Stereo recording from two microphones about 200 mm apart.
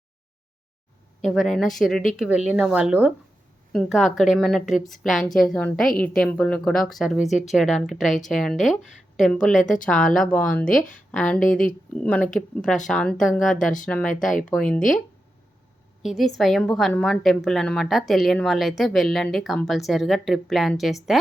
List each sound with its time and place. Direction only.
1.2 s a woman's voice: centre (ahead or behind)
9.6 s speech: 40° left (ahead or behind)
9.8 s a woman's voice: 5° left (ahead or behind)
10.7 s speech: 40° left (ahead or behind)
11.9 s a woman's voice: 5° left (ahead or behind)
14.8 s speech: 40° left (ahead or behind)
16.0 s a woman's voice: centre (ahead or behind)